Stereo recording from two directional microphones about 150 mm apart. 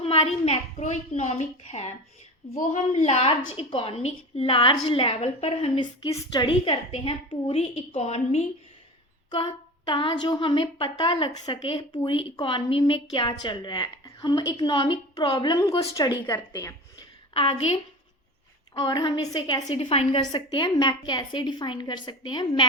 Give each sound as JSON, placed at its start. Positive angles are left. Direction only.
{"t": 0.0, "sound": "a woman's voice", "side_deg": 40}
{"t": 5.8, "sound": "a woman's voice", "side_deg": 25}
{"t": 9.3, "sound": "a woman's voice", "side_deg": 30}
{"t": 17.3, "sound": "a woman's voice", "side_deg": 40}
{"t": 18.7, "sound": "a woman's voice", "side_deg": 25}
{"t": 19.7, "sound": "a woman's voice", "side_deg": 45}
{"t": 20.7, "sound": "a woman's voice", "side_deg": 25}